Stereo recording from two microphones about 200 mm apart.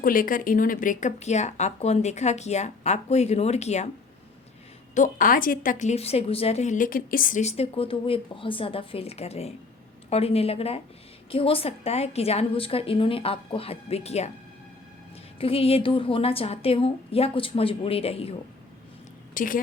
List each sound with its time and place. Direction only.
0.0 s a woman's voice: 45° left (ahead or behind)
4.9 s a woman's voice: 40° left (ahead or behind)
15.4 s a woman's voice: 30° left (ahead or behind)
19.3 s a woman's voice: 45° left (ahead or behind)